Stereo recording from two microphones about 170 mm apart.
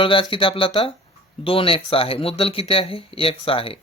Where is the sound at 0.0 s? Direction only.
30° left (ahead or behind).